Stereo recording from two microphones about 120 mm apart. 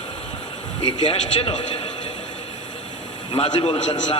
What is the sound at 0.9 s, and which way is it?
Speech, 45° left (ahead or behind).